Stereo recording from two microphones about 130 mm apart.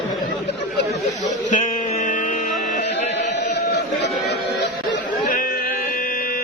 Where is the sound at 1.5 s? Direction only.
70° left (ahead or behind).